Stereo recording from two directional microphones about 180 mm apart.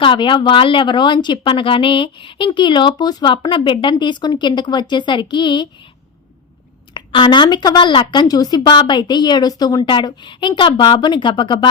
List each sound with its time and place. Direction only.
0.0 s speech: 25° left (ahead or behind)
6.9 s speech: 25° left (ahead or behind)